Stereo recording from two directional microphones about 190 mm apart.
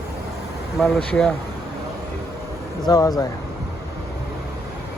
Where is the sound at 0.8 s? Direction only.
5° left (ahead or behind).